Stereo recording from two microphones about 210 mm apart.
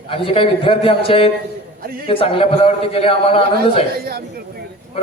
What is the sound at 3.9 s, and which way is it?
Speech, 45° right (ahead or behind).